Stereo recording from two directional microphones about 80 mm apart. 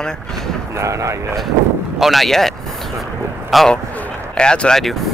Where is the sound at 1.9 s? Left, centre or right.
Centre.